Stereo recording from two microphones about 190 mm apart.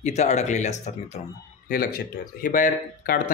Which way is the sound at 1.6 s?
50° left (ahead or behind).